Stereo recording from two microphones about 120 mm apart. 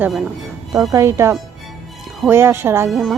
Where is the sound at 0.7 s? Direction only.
25° right (ahead or behind).